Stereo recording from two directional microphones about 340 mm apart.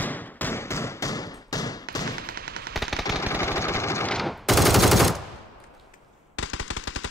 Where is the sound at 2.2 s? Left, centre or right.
Right.